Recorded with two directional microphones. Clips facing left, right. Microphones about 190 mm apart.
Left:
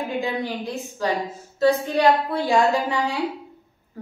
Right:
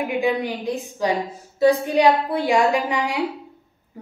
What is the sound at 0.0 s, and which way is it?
A woman's voice, 15° right (ahead or behind).